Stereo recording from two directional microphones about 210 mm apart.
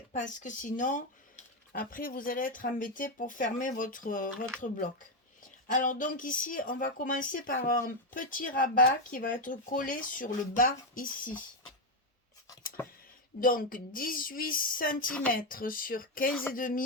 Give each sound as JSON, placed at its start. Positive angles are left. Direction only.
{"t": 0.1, "sound": "speech", "side_deg": 35}
{"t": 13.4, "sound": "speech", "side_deg": 40}